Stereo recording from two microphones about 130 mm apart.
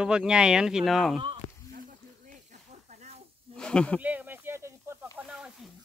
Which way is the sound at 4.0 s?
10° right (ahead or behind).